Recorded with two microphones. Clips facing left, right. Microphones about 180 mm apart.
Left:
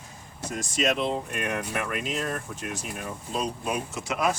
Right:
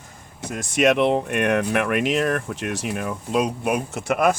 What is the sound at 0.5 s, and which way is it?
Speech, 65° right (ahead or behind).